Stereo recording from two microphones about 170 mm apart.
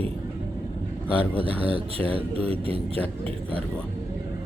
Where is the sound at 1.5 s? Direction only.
35° right (ahead or behind).